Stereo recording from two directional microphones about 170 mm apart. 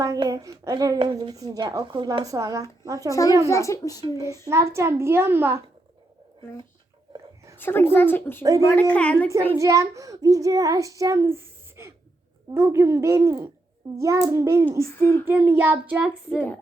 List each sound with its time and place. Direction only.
0.0 s child singing: 20° right (ahead or behind)
3.5 s speech: 20° left (ahead or behind)
4.0 s child singing: 20° right (ahead or behind)
4.4 s a child's voice: 15° right (ahead or behind)
7.6 s speech: 10° left (ahead or behind)
8.4 s child singing: 20° right (ahead or behind)
8.6 s speech: 10° left (ahead or behind)
9.6 s child singing: 20° right (ahead or behind)
12.5 s a child's voice: 15° right (ahead or behind)